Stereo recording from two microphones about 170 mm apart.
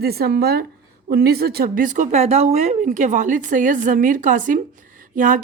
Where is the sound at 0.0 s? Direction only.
65° right (ahead or behind).